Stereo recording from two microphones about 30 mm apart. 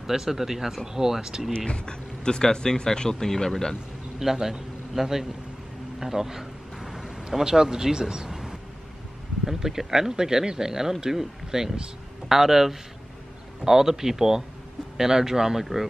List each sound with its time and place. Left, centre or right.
0.0 s speech: centre
1.7 s speech: left
4.2 s a man's voice: centre
5.9 s a sound: centre
9.4 s speech: centre